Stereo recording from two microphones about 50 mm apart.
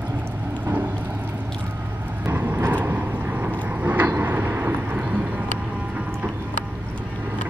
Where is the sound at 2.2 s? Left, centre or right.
Right.